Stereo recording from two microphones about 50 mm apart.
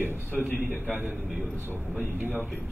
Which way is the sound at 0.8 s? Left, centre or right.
Right.